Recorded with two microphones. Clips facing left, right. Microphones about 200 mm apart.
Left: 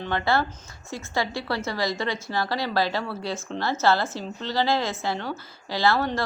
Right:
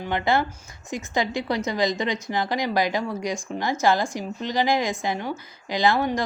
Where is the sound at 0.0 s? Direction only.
15° right (ahead or behind).